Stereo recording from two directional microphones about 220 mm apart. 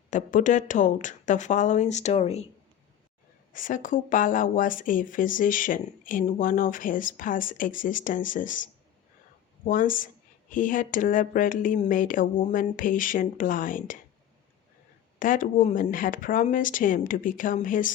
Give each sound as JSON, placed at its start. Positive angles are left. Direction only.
{"t": 0.1, "sound": "speech", "side_deg": 35}
{"t": 3.5, "sound": "speech", "side_deg": 35}
{"t": 15.2, "sound": "speech", "side_deg": 40}